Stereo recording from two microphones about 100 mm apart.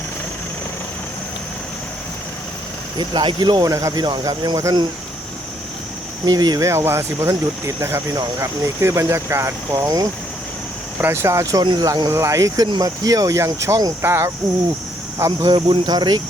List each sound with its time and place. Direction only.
3.0 s speech: 50° right (ahead or behind)
6.2 s speech: 45° right (ahead or behind)
6.7 s speech: 25° right (ahead or behind)
11.0 s speech: 25° right (ahead or behind)
11.6 s speech: 50° right (ahead or behind)
11.9 s speech: 40° right (ahead or behind)
15.4 s speech: 50° right (ahead or behind)